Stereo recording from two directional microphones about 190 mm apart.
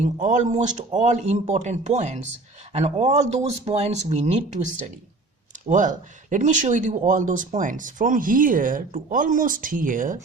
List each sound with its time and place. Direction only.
0.0 s speech: 40° right (ahead or behind)